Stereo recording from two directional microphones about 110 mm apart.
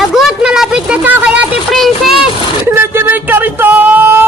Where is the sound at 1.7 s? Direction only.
Centre (ahead or behind).